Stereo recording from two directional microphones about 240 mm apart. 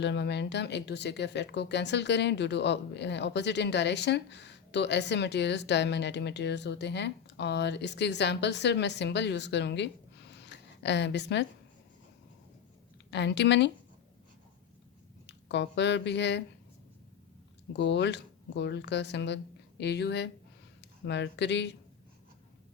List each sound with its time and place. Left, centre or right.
0.0 s speech: left
10.3 s a sound: left
13.1 s speech: left
15.3 s speech: left
17.7 s speech: left